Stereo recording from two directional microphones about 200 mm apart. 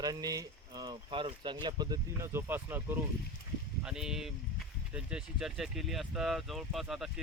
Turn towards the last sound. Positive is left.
turn(degrees=0)  # may be behind; listen again after turning